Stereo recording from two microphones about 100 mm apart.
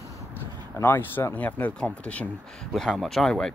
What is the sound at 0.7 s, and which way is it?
Speech, 25° left (ahead or behind).